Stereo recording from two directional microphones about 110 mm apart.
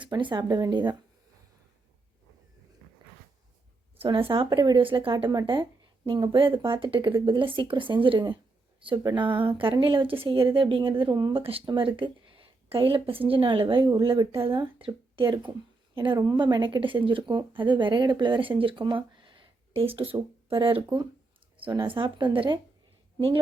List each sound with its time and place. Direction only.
0.0 s speech: 45° right (ahead or behind)
3.9 s speech: 60° right (ahead or behind)
16.1 s speech: 35° right (ahead or behind)